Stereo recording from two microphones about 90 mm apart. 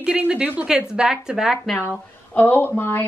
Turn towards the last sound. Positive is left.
turn(degrees=25)  # may be behind; listen again after turning